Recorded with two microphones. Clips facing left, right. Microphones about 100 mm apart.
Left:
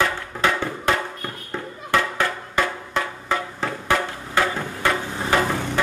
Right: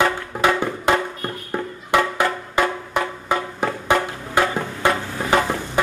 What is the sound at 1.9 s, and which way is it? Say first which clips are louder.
Music: right 3 dB; 15° right (ahead or behind).